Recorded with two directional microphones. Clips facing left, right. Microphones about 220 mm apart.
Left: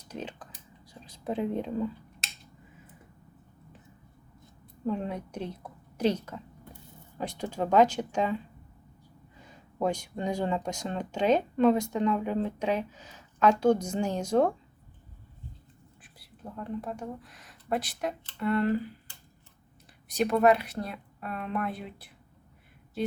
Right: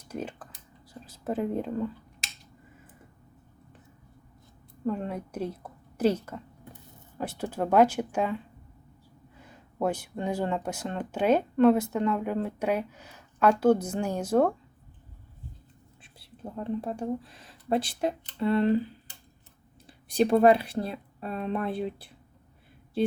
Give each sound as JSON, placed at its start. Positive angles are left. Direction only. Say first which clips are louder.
{"t": 0.1, "sound": "speech", "louder": "right 3 dB", "side_deg": -10}
{"t": 4.9, "sound": "speech", "louder": "right 1 dB", "side_deg": -5}
{"t": 9.7, "sound": "speech", "louder": "right 1 dB", "side_deg": -5}
{"t": 16.1, "sound": "speech", "louder": "right 4 dB", "side_deg": -30}
{"t": 19.9, "sound": "speech", "louder": "right 4 dB", "side_deg": -30}